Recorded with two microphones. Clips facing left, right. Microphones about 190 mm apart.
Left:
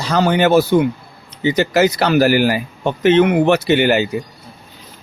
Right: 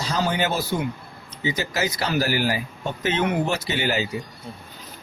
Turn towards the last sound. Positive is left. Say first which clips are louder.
# left 10 dB
turn(degrees=65)  # may be behind; listen again after turning